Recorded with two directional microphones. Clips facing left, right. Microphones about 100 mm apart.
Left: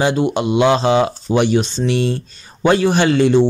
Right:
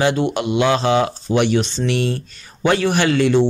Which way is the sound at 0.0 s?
20° left (ahead or behind).